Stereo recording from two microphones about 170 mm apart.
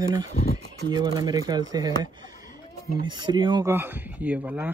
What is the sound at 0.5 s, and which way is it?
Speech, 25° right (ahead or behind).